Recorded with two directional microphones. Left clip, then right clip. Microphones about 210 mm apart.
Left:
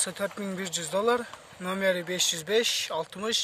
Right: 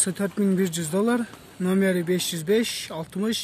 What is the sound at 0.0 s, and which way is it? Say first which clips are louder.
Speech: right 5 dB; 10° left (ahead or behind).